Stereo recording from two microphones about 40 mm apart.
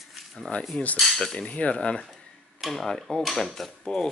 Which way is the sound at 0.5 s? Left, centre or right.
Left.